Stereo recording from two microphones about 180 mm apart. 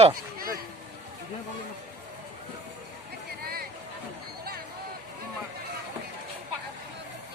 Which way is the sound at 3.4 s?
55° right (ahead or behind).